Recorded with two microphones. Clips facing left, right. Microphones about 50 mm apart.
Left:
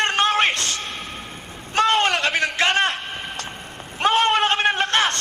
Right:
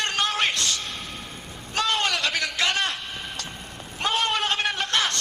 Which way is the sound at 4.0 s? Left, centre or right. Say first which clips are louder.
Left 7 dB; left.